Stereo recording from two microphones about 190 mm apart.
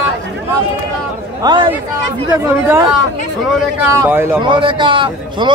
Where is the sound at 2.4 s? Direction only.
15° right (ahead or behind).